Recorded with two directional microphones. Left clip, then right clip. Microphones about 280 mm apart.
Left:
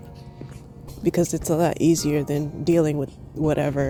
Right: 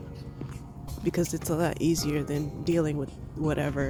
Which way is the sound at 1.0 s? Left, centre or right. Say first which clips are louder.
Left 7 dB; centre.